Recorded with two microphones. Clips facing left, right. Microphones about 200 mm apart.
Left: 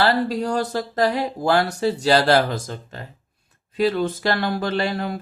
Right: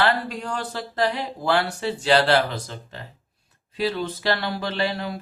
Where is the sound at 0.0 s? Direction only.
35° left (ahead or behind).